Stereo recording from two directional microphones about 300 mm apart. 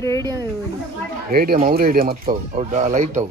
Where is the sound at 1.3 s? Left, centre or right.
Right.